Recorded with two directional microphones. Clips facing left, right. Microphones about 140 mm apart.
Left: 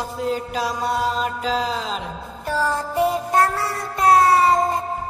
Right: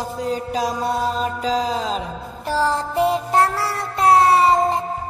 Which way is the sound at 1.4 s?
40° right (ahead or behind).